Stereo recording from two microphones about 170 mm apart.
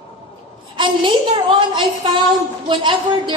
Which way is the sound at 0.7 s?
30° right (ahead or behind).